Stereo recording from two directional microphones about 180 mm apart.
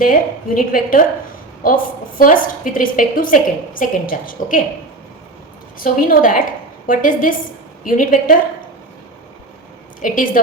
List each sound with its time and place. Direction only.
0.0 s a woman's voice: 50° left (ahead or behind)
5.8 s a woman's voice: 50° left (ahead or behind)
10.0 s a woman's voice: 50° left (ahead or behind)